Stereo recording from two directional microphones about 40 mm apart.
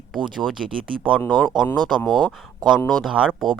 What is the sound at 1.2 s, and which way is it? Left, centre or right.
Speech, centre.